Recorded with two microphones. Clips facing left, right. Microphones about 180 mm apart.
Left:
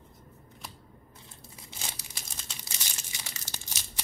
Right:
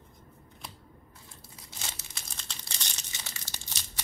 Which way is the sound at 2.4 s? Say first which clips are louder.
Right 1 dB; 5° left (ahead or behind).